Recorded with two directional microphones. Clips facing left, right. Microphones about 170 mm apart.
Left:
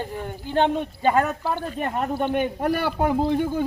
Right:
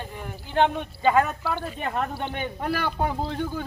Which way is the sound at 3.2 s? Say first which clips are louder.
Left 7 dB; 15° left (ahead or behind).